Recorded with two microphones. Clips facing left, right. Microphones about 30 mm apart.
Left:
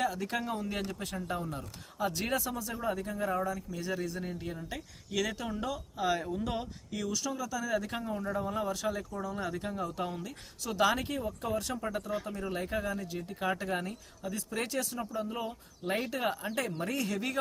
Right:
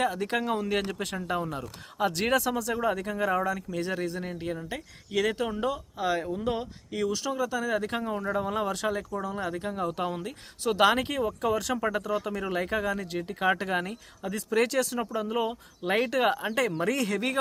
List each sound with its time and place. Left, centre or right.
0.0 s speech: right
3.8 s speech: right
5.5 s speech: right
6.9 s speech: right
9.3 s speech: right
9.7 s speech: right
12.2 s speech: right
15.3 s speech: right
16.5 s speech: right